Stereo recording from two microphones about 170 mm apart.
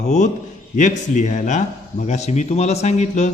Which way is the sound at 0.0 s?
45° left (ahead or behind).